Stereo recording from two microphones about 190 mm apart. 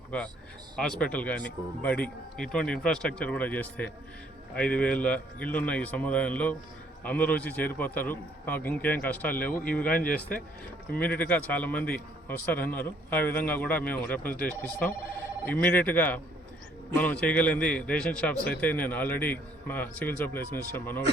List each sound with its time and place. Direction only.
0.8 s a man's voice: 5° left (ahead or behind)